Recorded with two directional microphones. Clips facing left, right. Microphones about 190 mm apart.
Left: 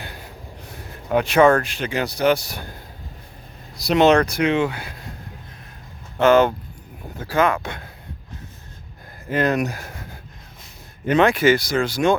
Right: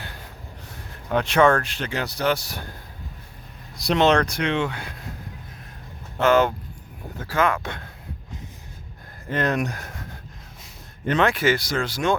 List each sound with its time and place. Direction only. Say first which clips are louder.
1.1 s speech: left 3 dB; 10° left (ahead or behind)
3.8 s speech: left 4 dB; 5° left (ahead or behind)
6.2 s speech: left 4 dB; 20° left (ahead or behind)
9.3 s speech: left 3 dB; 5° left (ahead or behind)